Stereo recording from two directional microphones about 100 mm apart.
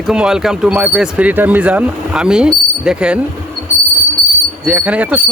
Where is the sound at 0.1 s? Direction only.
5° right (ahead or behind).